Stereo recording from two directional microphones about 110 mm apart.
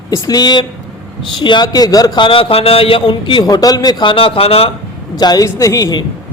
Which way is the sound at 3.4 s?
35° left (ahead or behind).